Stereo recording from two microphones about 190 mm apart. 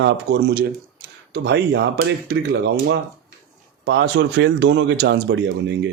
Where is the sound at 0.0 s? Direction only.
70° right (ahead or behind).